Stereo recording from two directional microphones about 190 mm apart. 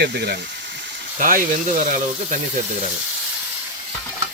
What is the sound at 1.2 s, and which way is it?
Speech, 45° right (ahead or behind).